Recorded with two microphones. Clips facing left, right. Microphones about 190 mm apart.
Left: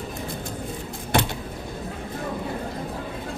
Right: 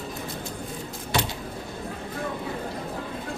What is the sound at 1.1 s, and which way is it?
Vehicle, 55° left (ahead or behind).